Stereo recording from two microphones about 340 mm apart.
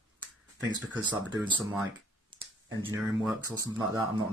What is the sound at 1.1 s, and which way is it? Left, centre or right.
Speech, centre.